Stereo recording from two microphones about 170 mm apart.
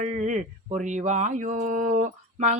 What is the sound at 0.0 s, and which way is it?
Humming, 45° right (ahead or behind).